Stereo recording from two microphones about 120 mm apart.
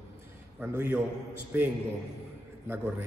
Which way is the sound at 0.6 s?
15° right (ahead or behind).